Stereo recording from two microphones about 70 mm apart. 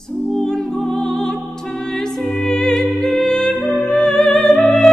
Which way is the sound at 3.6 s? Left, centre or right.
Left.